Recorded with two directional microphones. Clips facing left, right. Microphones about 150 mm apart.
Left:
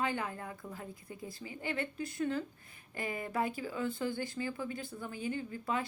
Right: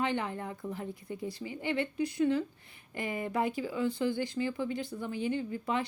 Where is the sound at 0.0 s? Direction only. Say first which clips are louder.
Right 3 dB; 20° right (ahead or behind).